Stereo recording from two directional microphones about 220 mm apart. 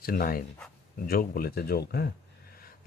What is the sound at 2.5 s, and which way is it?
Sniff, 40° left (ahead or behind).